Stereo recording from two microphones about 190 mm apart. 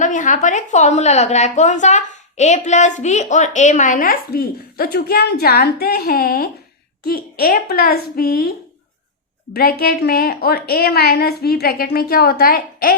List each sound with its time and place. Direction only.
0.0 s a woman's voice: 40° left (ahead or behind)